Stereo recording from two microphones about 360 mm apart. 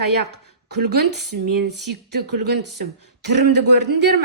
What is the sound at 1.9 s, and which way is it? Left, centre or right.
Speech, right.